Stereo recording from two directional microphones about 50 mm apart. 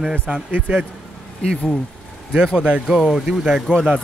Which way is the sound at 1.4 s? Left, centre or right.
Centre.